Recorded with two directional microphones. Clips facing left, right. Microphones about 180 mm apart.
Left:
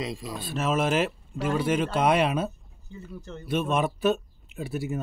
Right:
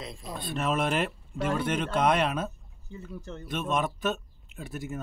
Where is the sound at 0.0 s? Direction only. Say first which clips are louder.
Left 6 dB; 90° left.